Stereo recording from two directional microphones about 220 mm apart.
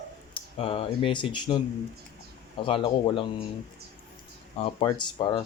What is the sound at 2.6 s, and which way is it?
Speech, 25° left (ahead or behind).